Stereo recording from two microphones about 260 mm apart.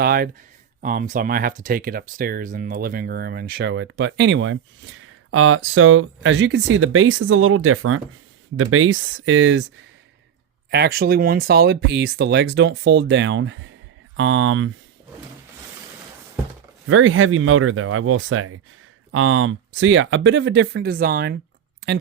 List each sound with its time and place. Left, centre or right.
0.0 s speech: right
10.7 s speech: right
16.8 s speech: right